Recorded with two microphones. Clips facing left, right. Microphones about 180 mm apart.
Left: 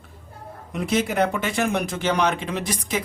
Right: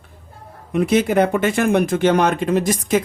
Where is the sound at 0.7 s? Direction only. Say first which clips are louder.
Right 7 dB; 55° right (ahead or behind).